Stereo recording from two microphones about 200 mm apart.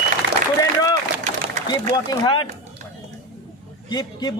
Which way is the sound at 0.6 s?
15° left (ahead or behind).